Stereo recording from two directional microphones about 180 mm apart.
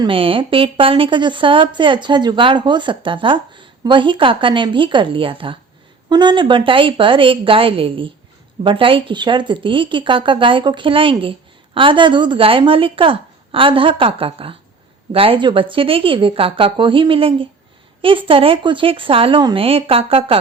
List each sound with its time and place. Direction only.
0.0 s a woman's voice: 30° right (ahead or behind)